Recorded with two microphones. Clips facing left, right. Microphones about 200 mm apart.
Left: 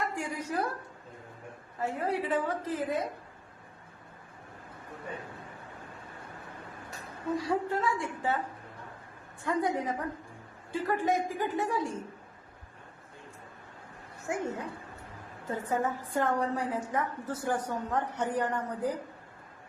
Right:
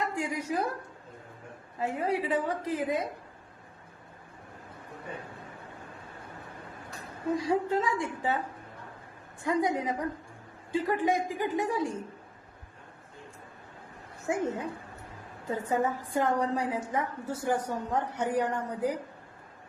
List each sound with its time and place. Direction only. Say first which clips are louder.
0.2 s a sound: right 2 dB; 15° right (ahead or behind)
1.8 s a woman's voice: right 2 dB; 15° right (ahead or behind)
7.3 s a woman's voice: right 3 dB; 15° right (ahead or behind)
9.4 s a woman's voice: right 2 dB; 15° right (ahead or behind)
14.3 s a woman's voice: right 3 dB; 20° right (ahead or behind)